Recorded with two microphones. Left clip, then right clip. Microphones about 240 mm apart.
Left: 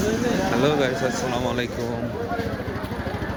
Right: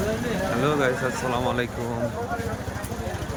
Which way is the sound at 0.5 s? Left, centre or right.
Centre.